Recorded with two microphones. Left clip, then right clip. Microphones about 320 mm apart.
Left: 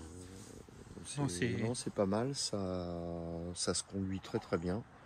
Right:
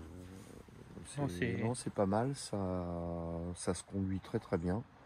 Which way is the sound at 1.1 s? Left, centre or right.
Centre.